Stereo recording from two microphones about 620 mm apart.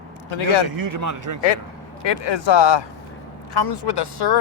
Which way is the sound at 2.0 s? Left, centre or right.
Left.